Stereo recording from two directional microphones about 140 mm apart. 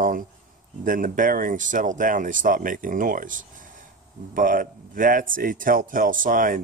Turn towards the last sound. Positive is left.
turn(degrees=-70)  # may be behind; listen again after turning